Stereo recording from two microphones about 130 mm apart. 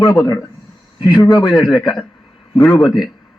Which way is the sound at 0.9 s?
35° left (ahead or behind).